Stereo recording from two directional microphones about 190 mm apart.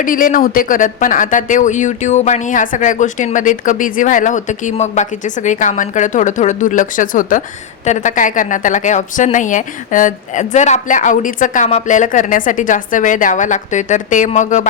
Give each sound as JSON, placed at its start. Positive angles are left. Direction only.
{"t": 0.0, "sound": "speech", "side_deg": 45}